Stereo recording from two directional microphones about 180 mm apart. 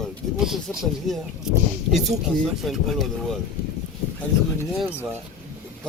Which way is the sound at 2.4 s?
Centre (ahead or behind).